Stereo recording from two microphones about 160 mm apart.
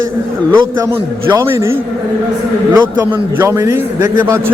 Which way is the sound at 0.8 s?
15° right (ahead or behind).